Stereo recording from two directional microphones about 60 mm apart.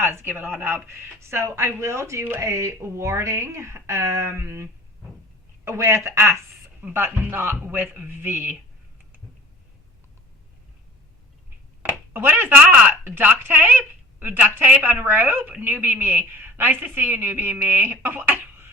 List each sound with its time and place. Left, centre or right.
0.0 s speech: right
6.8 s a woman's voice: right
11.8 s a sound: right
12.5 s speech: centre
13.1 s a woman's voice: right